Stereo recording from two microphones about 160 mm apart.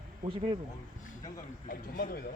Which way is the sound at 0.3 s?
35° right (ahead or behind).